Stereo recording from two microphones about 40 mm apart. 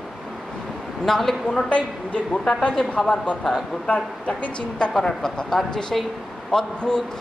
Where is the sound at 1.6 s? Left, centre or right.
Left.